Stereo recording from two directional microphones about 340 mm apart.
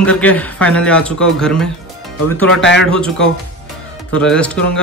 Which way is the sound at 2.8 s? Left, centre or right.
Centre.